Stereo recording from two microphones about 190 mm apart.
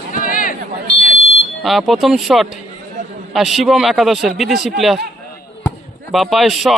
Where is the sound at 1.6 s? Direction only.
Centre (ahead or behind).